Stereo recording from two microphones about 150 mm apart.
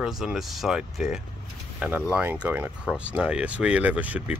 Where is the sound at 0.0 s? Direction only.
Centre (ahead or behind).